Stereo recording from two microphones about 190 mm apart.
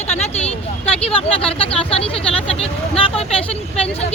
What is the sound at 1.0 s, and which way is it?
Speech, 30° left (ahead or behind).